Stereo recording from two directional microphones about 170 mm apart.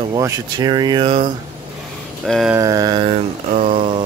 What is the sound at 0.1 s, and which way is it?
Speech, 20° right (ahead or behind).